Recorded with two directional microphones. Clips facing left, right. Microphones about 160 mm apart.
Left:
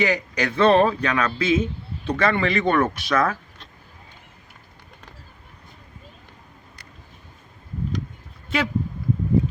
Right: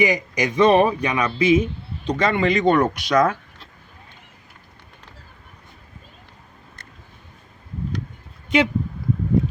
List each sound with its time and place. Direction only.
0.0 s a man's voice: 15° right (ahead or behind)
8.4 s speech: 20° right (ahead or behind)